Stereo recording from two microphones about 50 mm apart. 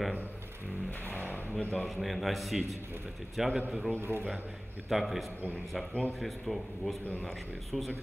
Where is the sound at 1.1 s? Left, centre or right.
Left.